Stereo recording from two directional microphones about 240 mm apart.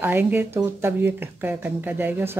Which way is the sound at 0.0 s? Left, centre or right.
Centre.